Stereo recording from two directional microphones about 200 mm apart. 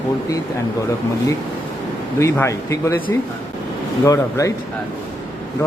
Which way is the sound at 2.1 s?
15° left (ahead or behind).